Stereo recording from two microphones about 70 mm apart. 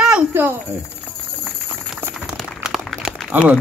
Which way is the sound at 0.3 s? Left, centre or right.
Right.